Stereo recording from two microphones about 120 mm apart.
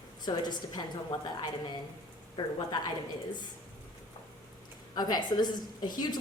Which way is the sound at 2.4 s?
45° left (ahead or behind).